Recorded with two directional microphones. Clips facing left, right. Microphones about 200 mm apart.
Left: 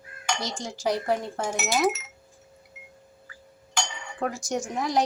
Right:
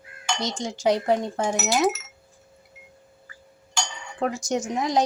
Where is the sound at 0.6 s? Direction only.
20° right (ahead or behind).